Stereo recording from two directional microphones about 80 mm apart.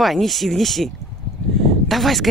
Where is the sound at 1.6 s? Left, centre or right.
Centre.